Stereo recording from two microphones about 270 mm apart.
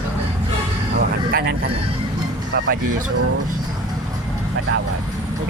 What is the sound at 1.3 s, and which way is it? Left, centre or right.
Speech, right.